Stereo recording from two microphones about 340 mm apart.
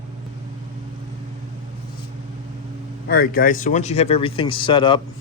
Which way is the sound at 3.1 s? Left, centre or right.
Left.